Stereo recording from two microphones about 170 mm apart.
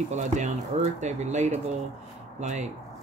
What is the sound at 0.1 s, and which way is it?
Speech, 45° right (ahead or behind).